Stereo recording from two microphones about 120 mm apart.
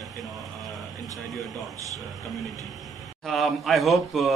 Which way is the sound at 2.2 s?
Centre (ahead or behind).